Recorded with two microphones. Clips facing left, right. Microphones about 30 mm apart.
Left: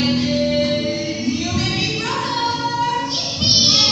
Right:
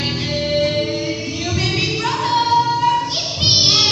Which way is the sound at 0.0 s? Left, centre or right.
Right.